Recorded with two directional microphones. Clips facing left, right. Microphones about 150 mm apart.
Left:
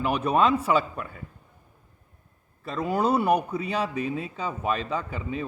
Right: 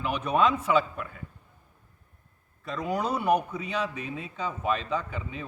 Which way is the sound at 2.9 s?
30° left (ahead or behind).